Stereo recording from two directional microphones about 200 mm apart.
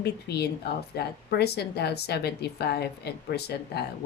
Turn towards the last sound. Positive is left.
turn(degrees=55)  # may be behind; listen again after turning